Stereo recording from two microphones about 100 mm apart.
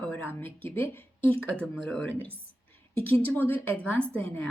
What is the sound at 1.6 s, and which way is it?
Speech, 5° left (ahead or behind).